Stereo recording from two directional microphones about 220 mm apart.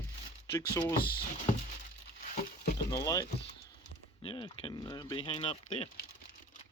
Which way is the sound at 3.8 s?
25° left (ahead or behind).